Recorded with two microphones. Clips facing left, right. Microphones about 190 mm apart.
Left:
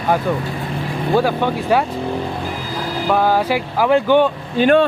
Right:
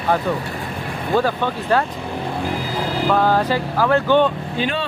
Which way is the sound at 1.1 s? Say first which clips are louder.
Left 2 dB; 10° left (ahead or behind).